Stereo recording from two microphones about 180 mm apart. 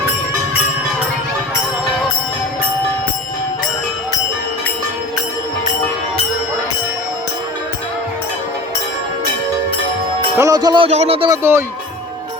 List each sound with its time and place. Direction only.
10.3 s music: 20° right (ahead or behind)
10.8 s speech: 35° right (ahead or behind)
11.3 s speech: 15° right (ahead or behind)